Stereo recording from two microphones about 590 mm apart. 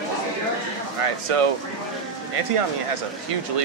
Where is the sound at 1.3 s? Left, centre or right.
Right.